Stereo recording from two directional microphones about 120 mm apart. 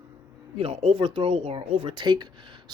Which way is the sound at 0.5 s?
55° right (ahead or behind).